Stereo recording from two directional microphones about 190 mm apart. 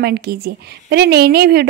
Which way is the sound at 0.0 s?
55° right (ahead or behind).